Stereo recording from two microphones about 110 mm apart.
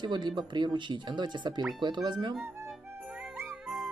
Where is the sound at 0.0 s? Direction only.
45° right (ahead or behind).